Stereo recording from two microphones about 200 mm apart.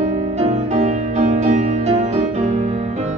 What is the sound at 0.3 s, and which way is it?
Music, 35° right (ahead or behind).